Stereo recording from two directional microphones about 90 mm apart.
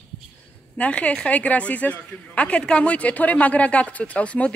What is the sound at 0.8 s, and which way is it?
A woman's voice, 15° left (ahead or behind).